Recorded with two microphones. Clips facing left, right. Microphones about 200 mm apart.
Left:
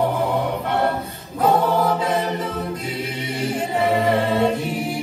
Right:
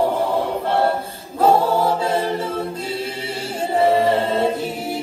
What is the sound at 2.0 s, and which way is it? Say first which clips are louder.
Choir: right 1 dB; 30° right (ahead or behind).